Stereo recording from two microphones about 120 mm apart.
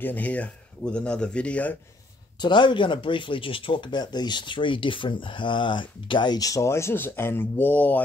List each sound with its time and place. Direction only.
0.0 s speech: 15° left (ahead or behind)
2.3 s speech: 40° left (ahead or behind); by 8.0 s 15° left (ahead or behind)